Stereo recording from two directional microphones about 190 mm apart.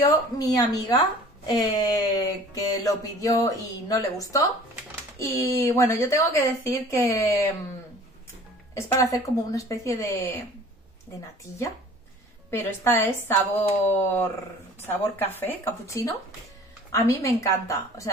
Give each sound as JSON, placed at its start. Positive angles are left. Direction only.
{"t": 0.0, "sound": "a sound", "side_deg": 20}
{"t": 5.2, "sound": "a woman's voice", "side_deg": 15}
{"t": 8.7, "sound": "a woman's voice", "side_deg": 15}